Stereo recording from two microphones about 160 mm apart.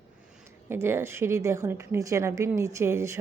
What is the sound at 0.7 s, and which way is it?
A woman's voice, 15° right (ahead or behind).